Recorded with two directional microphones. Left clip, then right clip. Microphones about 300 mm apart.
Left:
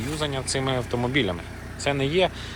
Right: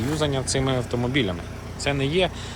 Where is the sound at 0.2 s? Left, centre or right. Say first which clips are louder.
Right 1 dB; centre.